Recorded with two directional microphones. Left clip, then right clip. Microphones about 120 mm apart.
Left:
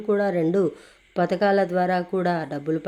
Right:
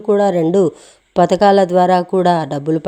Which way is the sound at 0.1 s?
55° right (ahead or behind).